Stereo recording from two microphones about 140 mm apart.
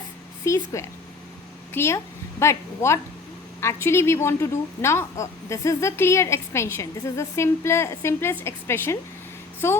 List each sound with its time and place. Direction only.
0.4 s a woman's voice: 20° left (ahead or behind)